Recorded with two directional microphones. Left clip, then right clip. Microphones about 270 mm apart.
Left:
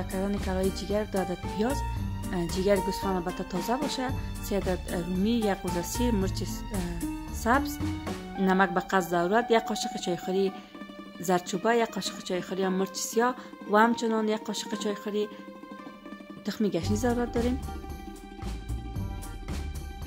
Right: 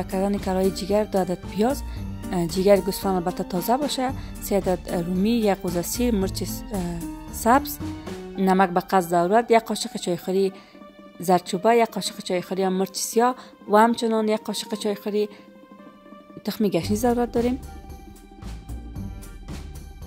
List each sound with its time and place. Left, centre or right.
0.0 s speech: right
7.8 s speech: centre
8.4 s speech: right
16.4 s speech: right